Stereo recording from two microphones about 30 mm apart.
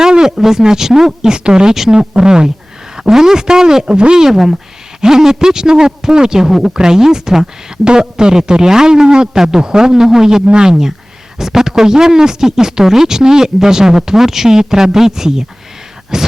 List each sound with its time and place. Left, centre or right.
0.0 s a man's voice: right
3.8 s speech: right
4.1 s a man's voice: centre
10.4 s speech: right
10.7 s a man's voice: centre